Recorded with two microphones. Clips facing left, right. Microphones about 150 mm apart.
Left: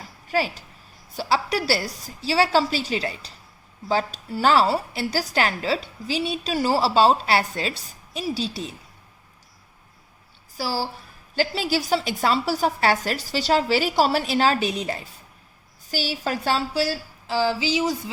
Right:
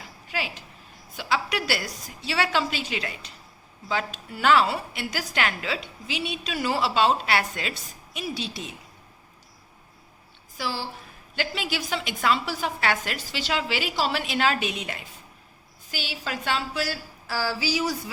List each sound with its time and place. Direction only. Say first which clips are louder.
0.0 s a sound: left 8 dB; 40° left (ahead or behind)
1.1 s a woman's voice: left 4 dB; 35° left (ahead or behind)
10.6 s a woman's voice: left 4 dB; 35° left (ahead or behind)